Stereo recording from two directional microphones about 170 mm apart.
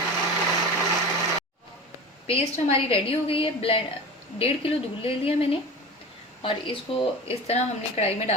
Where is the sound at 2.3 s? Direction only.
35° left (ahead or behind).